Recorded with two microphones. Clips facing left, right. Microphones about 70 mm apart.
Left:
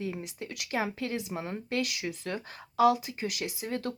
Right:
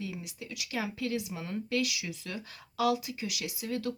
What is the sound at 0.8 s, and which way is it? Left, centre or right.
A woman's voice, left.